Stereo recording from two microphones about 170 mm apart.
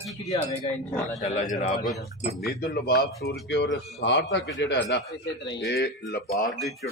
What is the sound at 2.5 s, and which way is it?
Speech, 65° left (ahead or behind).